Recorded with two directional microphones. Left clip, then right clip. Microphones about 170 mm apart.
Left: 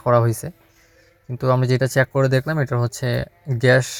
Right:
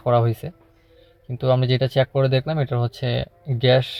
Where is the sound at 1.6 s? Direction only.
5° right (ahead or behind).